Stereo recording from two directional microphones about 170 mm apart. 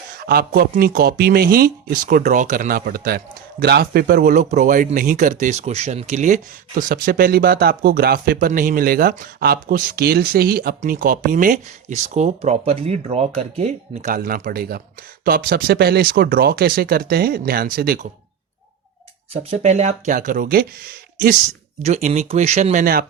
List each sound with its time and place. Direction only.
0.2 s speech: 60° right (ahead or behind)
19.3 s speech: 40° right (ahead or behind); by 20.7 s 55° right (ahead or behind)
21.8 s speech: 40° right (ahead or behind)